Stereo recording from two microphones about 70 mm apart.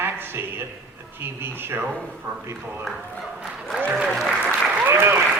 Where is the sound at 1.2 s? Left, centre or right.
Right.